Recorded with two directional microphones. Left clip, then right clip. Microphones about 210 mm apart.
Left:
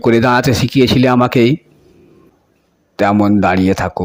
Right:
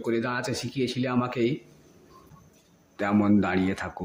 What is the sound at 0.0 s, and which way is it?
Speech, 45° left (ahead or behind).